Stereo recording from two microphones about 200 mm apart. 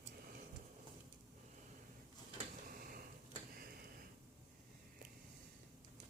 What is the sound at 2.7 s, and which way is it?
Tick-tock, 45° right (ahead or behind).